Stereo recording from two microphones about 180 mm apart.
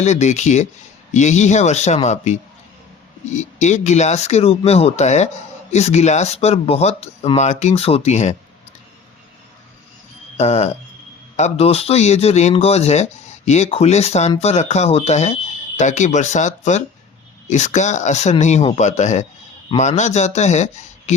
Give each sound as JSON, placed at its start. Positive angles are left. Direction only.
{"t": 0.0, "sound": "speech", "side_deg": 40}
{"t": 10.3, "sound": "speech", "side_deg": 35}